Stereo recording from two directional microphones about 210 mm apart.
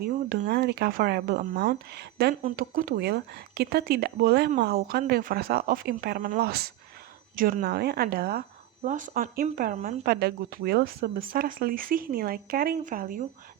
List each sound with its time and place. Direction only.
0.0 s speech: 50° right (ahead or behind)